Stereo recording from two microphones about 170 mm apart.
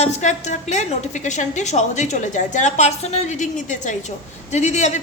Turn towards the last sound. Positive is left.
turn(degrees=45)  # may be behind; listen again after turning